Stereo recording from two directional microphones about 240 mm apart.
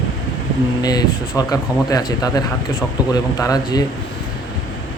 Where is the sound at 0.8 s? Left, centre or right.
Centre.